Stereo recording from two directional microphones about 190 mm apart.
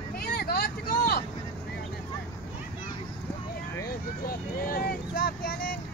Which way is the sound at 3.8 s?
50° left (ahead or behind).